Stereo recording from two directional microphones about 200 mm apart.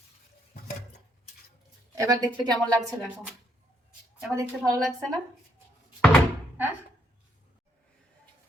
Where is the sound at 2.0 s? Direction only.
20° right (ahead or behind).